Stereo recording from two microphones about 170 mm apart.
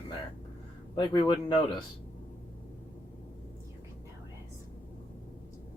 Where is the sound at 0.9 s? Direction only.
25° left (ahead or behind).